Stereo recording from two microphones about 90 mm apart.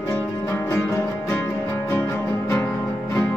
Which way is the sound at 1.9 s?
30° left (ahead or behind).